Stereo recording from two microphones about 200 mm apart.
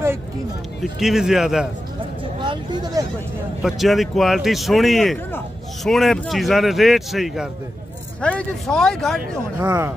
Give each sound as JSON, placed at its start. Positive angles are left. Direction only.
{"t": 0.9, "sound": "speech", "side_deg": 0}
{"t": 2.4, "sound": "speech", "side_deg": -25}
{"t": 3.6, "sound": "speech", "side_deg": 0}
{"t": 9.6, "sound": "speech", "side_deg": -15}